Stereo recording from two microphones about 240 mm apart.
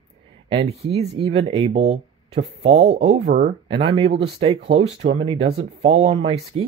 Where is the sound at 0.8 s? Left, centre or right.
Right.